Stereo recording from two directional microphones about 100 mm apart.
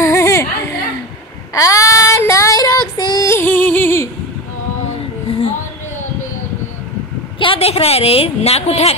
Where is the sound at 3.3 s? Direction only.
20° left (ahead or behind).